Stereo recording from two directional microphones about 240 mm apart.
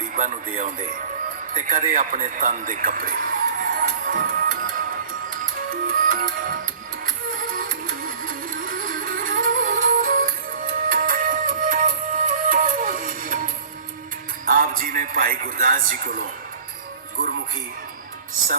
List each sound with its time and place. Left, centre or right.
0.2 s a man's voice: right
5.3 s music: right
14.4 s a man's voice: right